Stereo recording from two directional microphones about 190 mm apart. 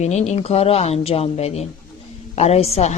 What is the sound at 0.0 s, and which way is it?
A woman's voice, 35° left (ahead or behind).